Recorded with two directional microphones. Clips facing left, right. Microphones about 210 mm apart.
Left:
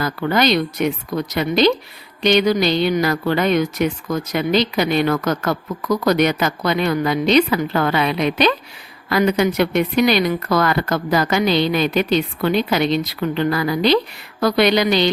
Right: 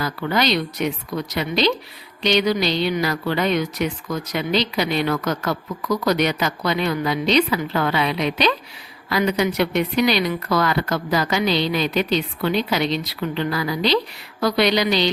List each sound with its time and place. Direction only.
0.0 s a woman's voice: 50° left (ahead or behind)